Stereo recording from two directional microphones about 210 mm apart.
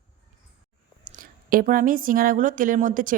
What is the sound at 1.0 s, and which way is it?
A woman's voice, 40° right (ahead or behind).